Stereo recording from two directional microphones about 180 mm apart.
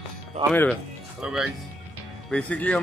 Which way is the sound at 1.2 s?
5° right (ahead or behind).